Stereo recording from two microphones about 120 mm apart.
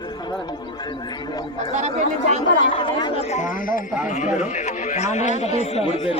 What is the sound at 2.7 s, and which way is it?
Speech, 45° left (ahead or behind).